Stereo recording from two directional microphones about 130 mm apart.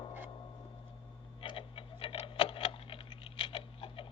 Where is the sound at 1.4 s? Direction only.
45° left (ahead or behind).